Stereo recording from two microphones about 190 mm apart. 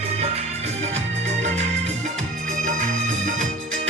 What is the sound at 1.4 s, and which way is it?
Music, 35° right (ahead or behind).